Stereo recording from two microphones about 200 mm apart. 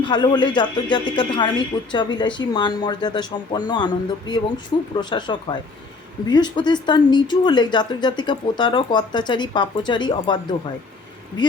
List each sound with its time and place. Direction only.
0.0 s a woman's voice: 20° left (ahead or behind)